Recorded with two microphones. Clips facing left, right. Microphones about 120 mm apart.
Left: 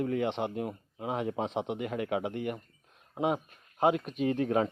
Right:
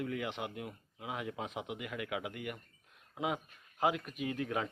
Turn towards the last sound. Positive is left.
turn(degrees=35)  # may be behind; listen again after turning